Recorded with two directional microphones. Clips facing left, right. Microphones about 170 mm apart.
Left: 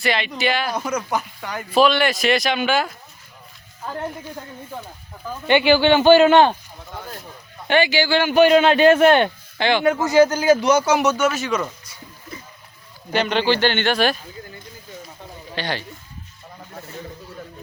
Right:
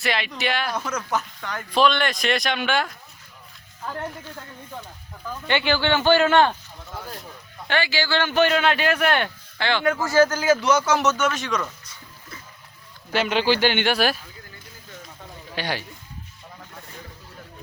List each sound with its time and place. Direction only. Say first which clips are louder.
0.0 s speech: left 4 dB; centre (ahead or behind); by 6.5 s 20° left (ahead or behind)
6.9 s speech: left 1 dB; centre (ahead or behind)
7.7 s speech: left 6 dB; 15° left (ahead or behind)
11.6 s a sound: left 4 dB; 20° left (ahead or behind)
13.1 s speech: left 2 dB; 5° right (ahead or behind)
15.5 s speech: left 2 dB; 10° right (ahead or behind)